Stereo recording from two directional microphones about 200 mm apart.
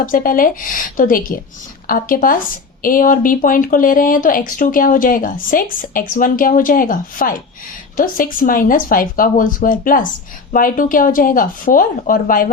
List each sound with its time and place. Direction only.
0.0 s speech: 45° left (ahead or behind)